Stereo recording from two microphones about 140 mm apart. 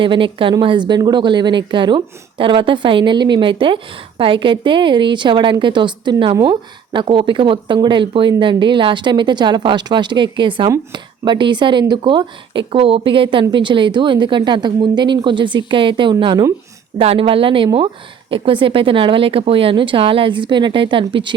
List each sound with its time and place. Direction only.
0.0 s speech: 35° right (ahead or behind)
6.3 s a woman's voice: 20° right (ahead or behind)
6.9 s speech: 35° right (ahead or behind)
17.0 s speech: 45° right (ahead or behind)